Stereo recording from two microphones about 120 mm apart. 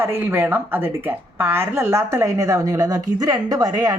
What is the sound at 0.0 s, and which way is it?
A woman's voice, 20° right (ahead or behind).